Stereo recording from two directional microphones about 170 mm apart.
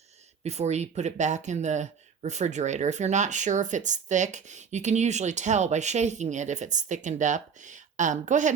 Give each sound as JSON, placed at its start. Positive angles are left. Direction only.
{"t": 0.4, "sound": "speech", "side_deg": -40}